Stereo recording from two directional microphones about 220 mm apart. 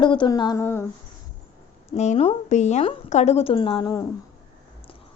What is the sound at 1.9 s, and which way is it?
A woman's voice, 30° left (ahead or behind).